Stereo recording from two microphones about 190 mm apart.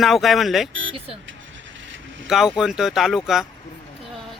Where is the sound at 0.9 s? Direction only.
30° right (ahead or behind).